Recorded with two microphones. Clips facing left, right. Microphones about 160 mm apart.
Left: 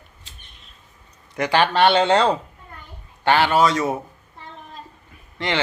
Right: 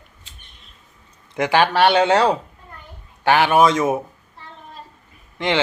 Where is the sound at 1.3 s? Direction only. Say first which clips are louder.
Right 2 dB; 15° right (ahead or behind).